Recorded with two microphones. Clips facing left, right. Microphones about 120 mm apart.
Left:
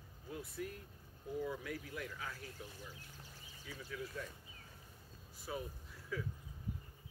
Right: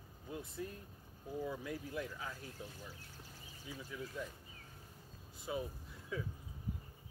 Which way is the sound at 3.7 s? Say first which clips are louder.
Even; 15° right (ahead or behind).